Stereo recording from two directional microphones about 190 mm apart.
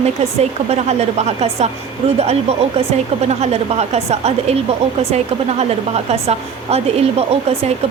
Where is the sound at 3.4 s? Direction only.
35° right (ahead or behind).